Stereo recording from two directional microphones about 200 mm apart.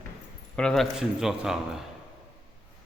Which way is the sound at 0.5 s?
5° left (ahead or behind).